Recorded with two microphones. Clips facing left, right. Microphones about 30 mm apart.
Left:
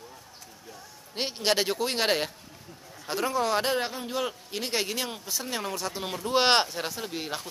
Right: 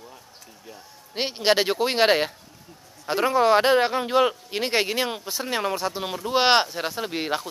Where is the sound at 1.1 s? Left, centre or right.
Right.